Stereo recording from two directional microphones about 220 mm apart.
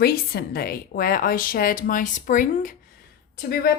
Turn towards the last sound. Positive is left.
turn(degrees=45)  # may be behind; listen again after turning